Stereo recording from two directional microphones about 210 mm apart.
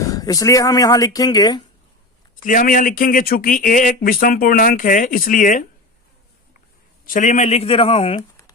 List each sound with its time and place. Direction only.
0.0 s speech: 15° left (ahead or behind)
2.4 s speech: 40° left (ahead or behind)
7.0 s speech: 40° left (ahead or behind)